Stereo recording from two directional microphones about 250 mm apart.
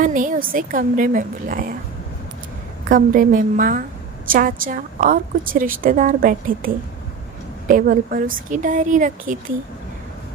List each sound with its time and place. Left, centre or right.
0.0 s a woman's voice: right
2.9 s a woman's voice: right
7.7 s a woman's voice: right